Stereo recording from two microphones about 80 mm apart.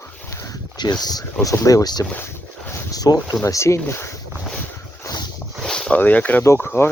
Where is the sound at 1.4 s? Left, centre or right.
Left.